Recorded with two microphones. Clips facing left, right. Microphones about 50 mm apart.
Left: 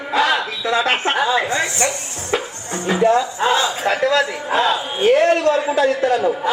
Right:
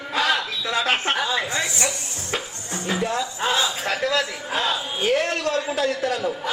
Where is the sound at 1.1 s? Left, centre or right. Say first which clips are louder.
Left 6 dB; centre.